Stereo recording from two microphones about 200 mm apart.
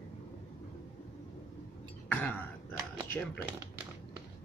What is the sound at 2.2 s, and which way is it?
Throat clearing, 10° left (ahead or behind).